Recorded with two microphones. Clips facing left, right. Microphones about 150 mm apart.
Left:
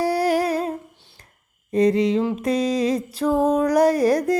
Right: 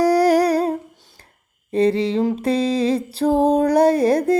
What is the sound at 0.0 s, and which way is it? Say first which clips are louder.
Humming: right 5 dB; 40° right (ahead or behind).